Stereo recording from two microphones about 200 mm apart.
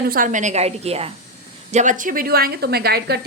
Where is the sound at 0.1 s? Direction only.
40° right (ahead or behind).